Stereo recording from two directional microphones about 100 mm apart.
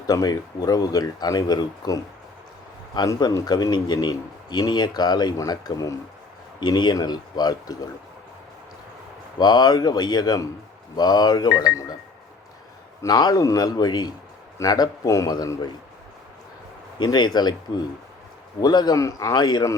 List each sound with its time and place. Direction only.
0.1 s speech: 35° left (ahead or behind)
9.4 s speech: 45° left (ahead or behind)
13.0 s speech: 40° left (ahead or behind)
17.0 s speech: 45° left (ahead or behind)